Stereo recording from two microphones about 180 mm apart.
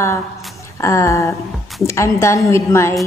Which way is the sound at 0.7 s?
15° left (ahead or behind).